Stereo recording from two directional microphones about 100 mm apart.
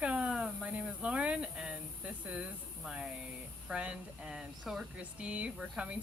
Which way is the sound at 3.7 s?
10° right (ahead or behind).